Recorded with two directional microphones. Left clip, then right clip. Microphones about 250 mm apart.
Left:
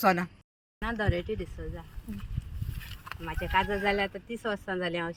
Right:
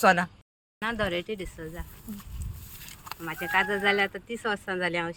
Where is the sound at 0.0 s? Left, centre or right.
Centre.